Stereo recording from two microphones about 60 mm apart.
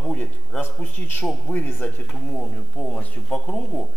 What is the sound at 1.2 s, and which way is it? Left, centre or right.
Speech, centre.